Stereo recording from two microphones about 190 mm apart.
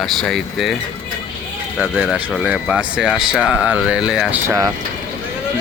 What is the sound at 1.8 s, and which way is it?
Speech, 10° right (ahead or behind).